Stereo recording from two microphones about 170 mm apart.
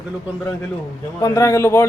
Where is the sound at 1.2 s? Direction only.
20° left (ahead or behind).